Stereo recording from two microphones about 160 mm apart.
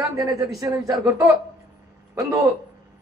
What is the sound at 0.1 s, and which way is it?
A man's voice, 20° right (ahead or behind).